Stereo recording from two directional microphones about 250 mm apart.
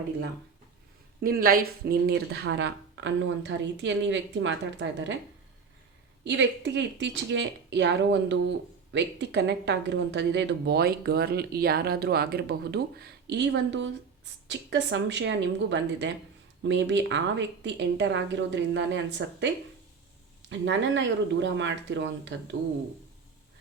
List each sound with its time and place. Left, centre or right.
1.2 s speech: right
6.2 s speech: right
20.5 s speech: right